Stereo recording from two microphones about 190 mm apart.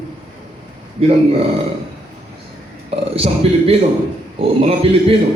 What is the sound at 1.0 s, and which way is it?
Speech, 35° right (ahead or behind).